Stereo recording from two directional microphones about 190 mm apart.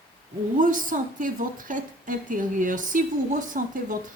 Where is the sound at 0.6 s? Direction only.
45° right (ahead or behind).